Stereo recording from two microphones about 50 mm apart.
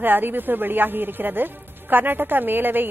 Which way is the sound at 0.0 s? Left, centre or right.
Right.